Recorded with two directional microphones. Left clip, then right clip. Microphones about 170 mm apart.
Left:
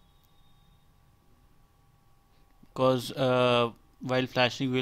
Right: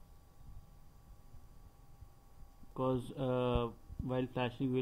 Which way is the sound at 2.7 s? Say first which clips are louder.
Left 11 dB; 65° left (ahead or behind).